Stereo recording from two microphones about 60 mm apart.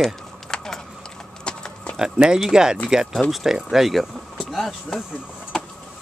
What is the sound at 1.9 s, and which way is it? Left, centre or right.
Speech, centre.